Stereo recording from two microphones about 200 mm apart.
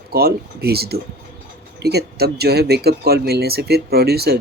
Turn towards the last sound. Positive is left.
turn(degrees=-50)  # may be behind; listen again after turning